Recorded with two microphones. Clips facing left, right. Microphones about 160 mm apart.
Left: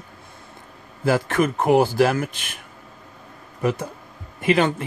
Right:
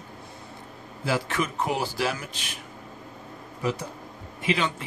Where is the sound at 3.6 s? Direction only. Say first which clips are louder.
Left 6 dB; 55° left (ahead or behind).